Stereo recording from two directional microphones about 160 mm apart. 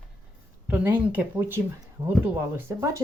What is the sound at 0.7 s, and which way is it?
Speech, 10° right (ahead or behind).